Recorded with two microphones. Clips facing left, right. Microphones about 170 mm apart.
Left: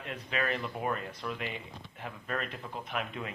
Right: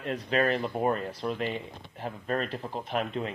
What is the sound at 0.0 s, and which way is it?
Speech, 35° right (ahead or behind).